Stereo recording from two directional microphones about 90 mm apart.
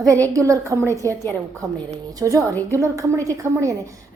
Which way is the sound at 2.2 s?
40° right (ahead or behind).